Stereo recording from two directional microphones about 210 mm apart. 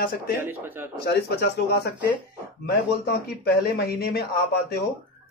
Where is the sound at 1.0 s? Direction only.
50° left (ahead or behind).